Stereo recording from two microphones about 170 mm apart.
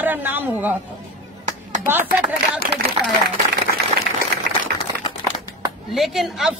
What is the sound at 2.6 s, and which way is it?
Speech, 55° right (ahead or behind).